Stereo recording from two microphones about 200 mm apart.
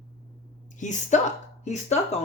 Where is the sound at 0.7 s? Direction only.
35° left (ahead or behind).